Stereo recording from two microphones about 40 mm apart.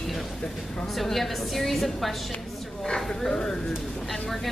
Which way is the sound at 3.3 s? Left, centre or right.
Left.